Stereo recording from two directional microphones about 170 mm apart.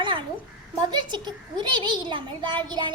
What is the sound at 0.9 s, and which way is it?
A child's voice, 25° right (ahead or behind).